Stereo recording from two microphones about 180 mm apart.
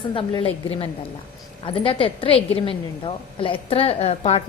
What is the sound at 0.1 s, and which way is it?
A woman's voice, 30° left (ahead or behind).